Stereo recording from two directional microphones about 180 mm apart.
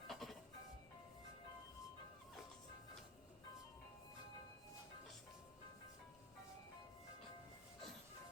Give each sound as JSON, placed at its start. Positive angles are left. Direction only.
{"t": 0.1, "sound": "music", "side_deg": 0}